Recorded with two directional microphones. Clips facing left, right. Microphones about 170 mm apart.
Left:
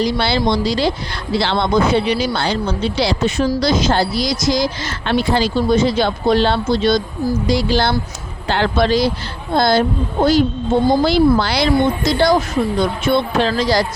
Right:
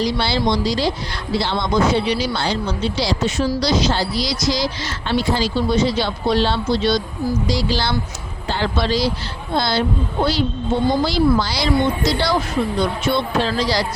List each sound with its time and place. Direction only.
0.0 s speech: 60° left (ahead or behind)
1.4 s speech: 70° left (ahead or behind); by 7.9 s 50° left (ahead or behind)
8.4 s speech: 65° left (ahead or behind); by 10.4 s 50° left (ahead or behind)
11.0 s speech: 60° left (ahead or behind)